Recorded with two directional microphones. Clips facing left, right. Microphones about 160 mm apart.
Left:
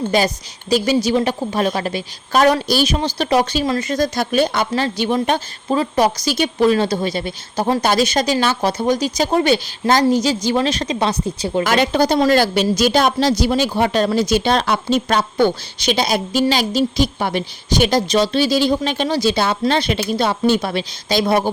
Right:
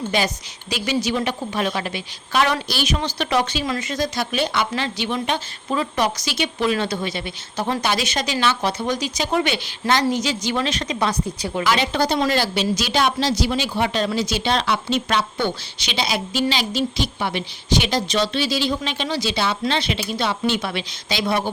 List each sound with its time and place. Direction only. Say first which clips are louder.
0.1 s speech: left 5 dB; 40° left (ahead or behind)
5.6 s speech: left 5 dB; 35° left (ahead or behind)
11.6 s speech: left 4 dB; 45° left (ahead or behind)